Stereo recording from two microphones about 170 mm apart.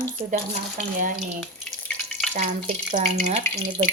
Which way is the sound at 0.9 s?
50° right (ahead or behind).